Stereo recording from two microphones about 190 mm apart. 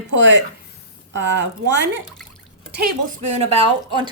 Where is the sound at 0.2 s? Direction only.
75° right (ahead or behind).